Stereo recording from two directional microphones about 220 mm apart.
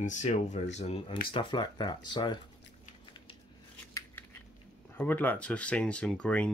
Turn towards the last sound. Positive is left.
turn(degrees=5)  # may be behind; listen again after turning